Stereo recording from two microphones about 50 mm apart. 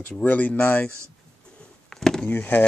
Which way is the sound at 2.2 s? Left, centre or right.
Left.